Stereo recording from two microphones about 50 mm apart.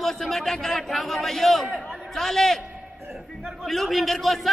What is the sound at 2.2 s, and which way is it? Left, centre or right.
Speech, centre.